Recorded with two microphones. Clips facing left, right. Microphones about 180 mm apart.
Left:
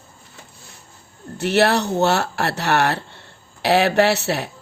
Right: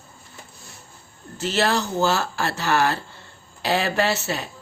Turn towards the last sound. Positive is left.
turn(degrees=70)  # may be behind; listen again after turning